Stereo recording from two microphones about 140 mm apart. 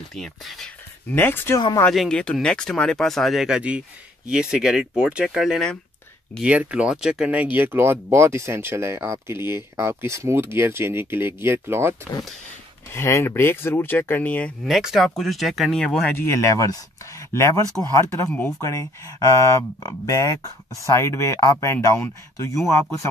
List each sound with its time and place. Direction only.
0.1 s speech: centre (ahead or behind)
1.1 s speech: 15° left (ahead or behind)
1.9 s speech: 5° left (ahead or behind); by 12.1 s 15° right (ahead or behind)
12.9 s speech: 20° left (ahead or behind)
14.6 s speech: centre (ahead or behind)
16.2 s speech: 25° left (ahead or behind)